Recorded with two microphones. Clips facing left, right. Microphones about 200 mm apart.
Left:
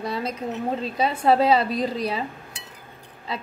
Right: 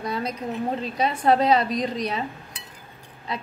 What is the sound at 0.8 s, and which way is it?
Speech, 30° left (ahead or behind).